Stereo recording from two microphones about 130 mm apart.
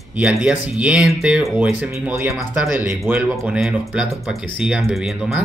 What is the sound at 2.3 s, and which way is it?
Speech, centre (ahead or behind).